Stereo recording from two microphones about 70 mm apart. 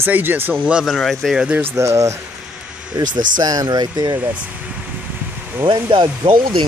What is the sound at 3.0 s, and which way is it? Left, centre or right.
Speech, right.